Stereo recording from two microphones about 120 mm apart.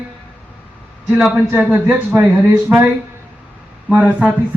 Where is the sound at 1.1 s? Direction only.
5° right (ahead or behind).